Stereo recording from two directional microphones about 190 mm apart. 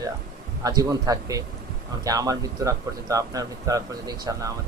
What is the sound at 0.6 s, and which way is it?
Speech, 20° right (ahead or behind).